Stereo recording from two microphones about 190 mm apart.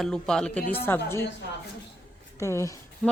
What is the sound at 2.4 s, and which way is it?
Speech, 15° left (ahead or behind).